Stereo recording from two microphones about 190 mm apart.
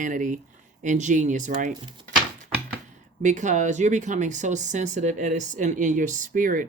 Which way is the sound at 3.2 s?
40° right (ahead or behind).